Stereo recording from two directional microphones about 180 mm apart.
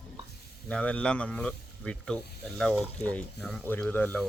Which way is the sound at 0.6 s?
5° left (ahead or behind).